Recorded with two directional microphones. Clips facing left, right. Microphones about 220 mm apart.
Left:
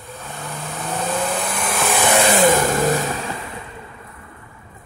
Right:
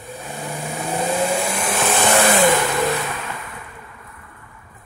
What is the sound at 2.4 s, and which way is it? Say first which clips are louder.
Vehicle: left 1 dB; 45° left (ahead or behind).